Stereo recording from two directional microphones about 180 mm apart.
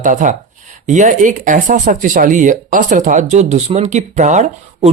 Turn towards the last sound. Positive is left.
turn(degrees=-40)  # may be behind; listen again after turning